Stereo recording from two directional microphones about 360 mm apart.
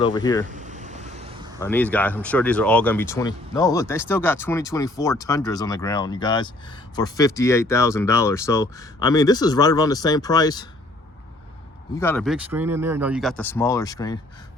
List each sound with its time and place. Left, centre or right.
0.0 s speech: centre
0.4 s vehicle: right
1.5 s speech: centre
11.9 s speech: centre